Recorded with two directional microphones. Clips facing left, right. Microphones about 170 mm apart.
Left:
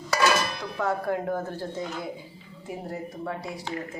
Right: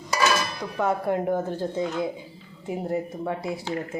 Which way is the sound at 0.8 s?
20° right (ahead or behind).